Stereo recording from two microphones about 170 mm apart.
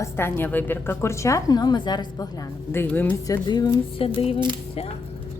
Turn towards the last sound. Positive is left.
turn(degrees=35)  # may be behind; listen again after turning